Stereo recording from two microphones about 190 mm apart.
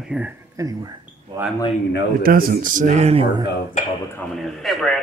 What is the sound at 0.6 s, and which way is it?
Speech, 20° right (ahead or behind).